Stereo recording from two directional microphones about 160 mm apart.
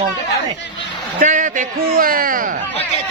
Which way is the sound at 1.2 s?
50° right (ahead or behind).